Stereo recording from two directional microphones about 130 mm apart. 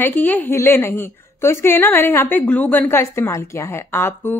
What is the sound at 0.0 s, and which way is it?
A woman's voice, 15° left (ahead or behind).